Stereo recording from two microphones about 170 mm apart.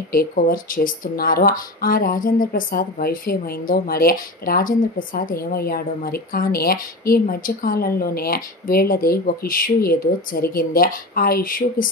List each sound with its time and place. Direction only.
0.1 s speech: 60° left (ahead or behind)